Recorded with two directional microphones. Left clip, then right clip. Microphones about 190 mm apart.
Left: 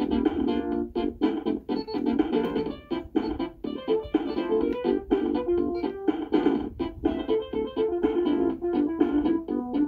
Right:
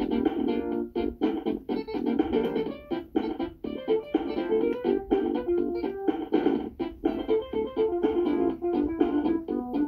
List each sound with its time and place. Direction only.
0.0 s music: 15° left (ahead or behind)